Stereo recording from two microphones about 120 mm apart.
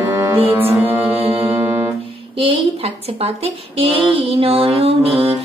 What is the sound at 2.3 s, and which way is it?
A woman's voice, 50° right (ahead or behind).